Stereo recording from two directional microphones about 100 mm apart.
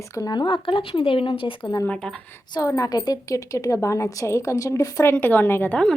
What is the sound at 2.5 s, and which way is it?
Speech, 35° left (ahead or behind).